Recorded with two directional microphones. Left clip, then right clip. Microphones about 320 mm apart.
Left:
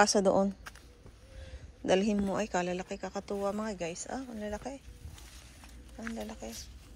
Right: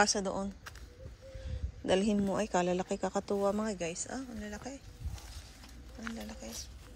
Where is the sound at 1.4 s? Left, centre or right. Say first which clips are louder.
Left 3 dB; centre.